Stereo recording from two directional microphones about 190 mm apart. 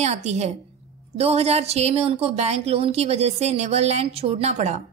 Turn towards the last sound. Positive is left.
turn(degrees=-35)  # may be behind; listen again after turning